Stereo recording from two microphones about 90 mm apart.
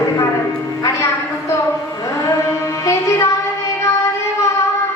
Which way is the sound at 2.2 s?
35° left (ahead or behind).